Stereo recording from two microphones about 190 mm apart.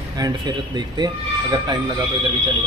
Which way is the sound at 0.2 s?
20° right (ahead or behind).